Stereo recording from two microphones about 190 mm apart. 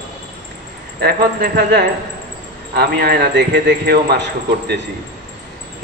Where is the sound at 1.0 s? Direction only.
55° right (ahead or behind).